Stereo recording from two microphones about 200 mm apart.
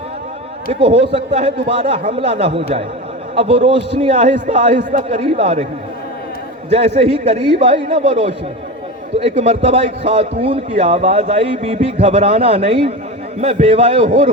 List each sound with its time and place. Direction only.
0.7 s a man's voice: 30° right (ahead or behind)
6.7 s a man's voice: 30° right (ahead or behind)